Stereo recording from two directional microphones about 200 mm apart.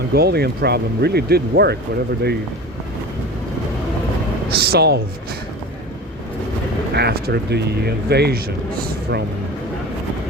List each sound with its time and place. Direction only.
0.1 s speech: 50° right (ahead or behind)
4.5 s speech: 50° right (ahead or behind)
6.9 s a man's voice: 55° right (ahead or behind)